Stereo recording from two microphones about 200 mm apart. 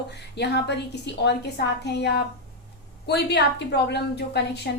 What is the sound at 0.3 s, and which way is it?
A woman's voice, 55° left (ahead or behind).